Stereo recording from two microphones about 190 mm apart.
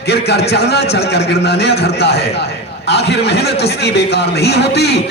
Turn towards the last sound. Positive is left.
turn(degrees=60)  # may be behind; listen again after turning